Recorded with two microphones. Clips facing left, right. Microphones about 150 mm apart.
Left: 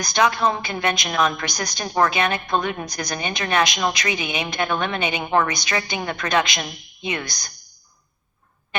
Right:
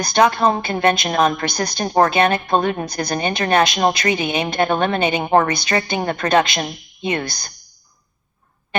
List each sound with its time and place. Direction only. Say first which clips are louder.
0.0 s a woman's voice: right 4 dB; 35° right (ahead or behind)